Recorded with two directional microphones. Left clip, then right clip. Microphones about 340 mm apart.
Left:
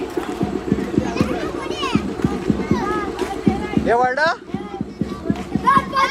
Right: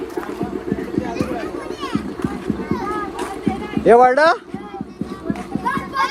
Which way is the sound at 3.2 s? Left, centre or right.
Centre.